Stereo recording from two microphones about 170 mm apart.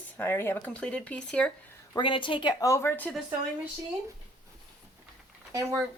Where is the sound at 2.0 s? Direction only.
30° left (ahead or behind); by 3.2 s 10° left (ahead or behind).